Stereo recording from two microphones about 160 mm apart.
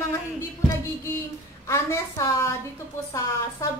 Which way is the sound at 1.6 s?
15° left (ahead or behind).